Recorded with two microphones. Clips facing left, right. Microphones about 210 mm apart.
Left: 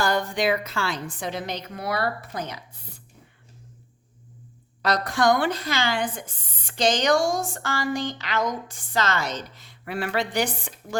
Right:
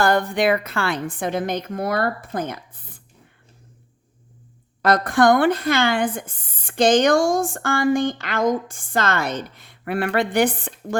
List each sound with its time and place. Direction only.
0.0 s speech: 55° right (ahead or behind)
4.8 s speech: 50° right (ahead or behind)